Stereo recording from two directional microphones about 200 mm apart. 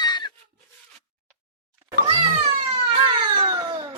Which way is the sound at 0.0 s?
20° left (ahead or behind).